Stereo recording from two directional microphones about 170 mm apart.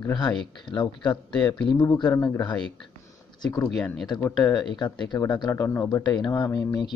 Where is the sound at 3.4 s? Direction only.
20° left (ahead or behind).